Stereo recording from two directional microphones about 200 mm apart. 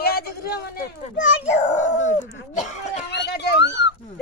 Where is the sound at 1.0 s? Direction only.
35° left (ahead or behind).